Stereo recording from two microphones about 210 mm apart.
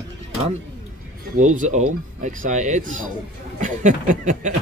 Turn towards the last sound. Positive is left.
turn(degrees=-35)  # may be behind; listen again after turning